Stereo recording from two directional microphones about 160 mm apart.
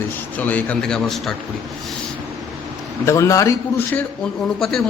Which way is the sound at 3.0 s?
20° left (ahead or behind).